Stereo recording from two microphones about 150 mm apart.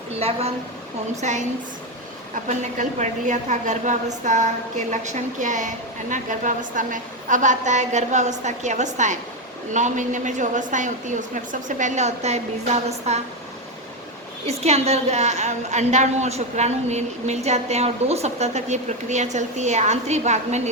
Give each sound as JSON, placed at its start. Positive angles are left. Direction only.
{"t": 0.2, "sound": "a woman's voice", "side_deg": -40}
{"t": 1.2, "sound": "a woman's voice", "side_deg": -50}
{"t": 14.4, "sound": "a woman's voice", "side_deg": -45}